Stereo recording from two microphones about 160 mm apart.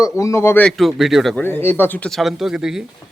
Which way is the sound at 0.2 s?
20° left (ahead or behind).